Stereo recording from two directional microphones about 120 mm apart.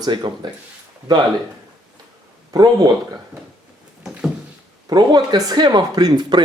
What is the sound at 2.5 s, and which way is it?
Speech, 35° right (ahead or behind).